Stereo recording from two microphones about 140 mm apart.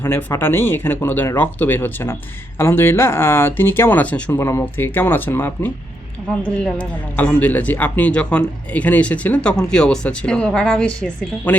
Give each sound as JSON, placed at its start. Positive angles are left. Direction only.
{"t": 0.0, "sound": "a man's voice", "side_deg": 15}
{"t": 6.7, "sound": "a man's voice", "side_deg": 10}